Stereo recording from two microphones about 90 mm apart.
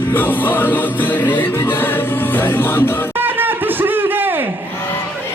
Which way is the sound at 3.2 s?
20° right (ahead or behind).